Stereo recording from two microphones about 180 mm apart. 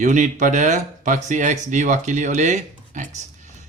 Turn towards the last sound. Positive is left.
turn(degrees=-40)  # may be behind; listen again after turning